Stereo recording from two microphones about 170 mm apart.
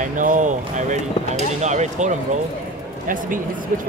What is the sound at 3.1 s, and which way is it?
Speech, 50° right (ahead or behind).